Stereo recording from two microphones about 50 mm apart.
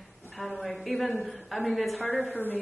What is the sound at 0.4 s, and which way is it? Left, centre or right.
Speech, centre.